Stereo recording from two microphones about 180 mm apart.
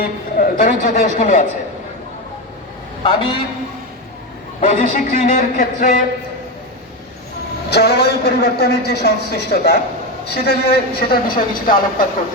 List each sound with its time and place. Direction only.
0.0 s a man's voice: 50° left (ahead or behind)
3.0 s a man's voice: 30° left (ahead or behind)
4.7 s a man's voice: 50° left (ahead or behind)
7.7 s a woman's voice: 60° left (ahead or behind)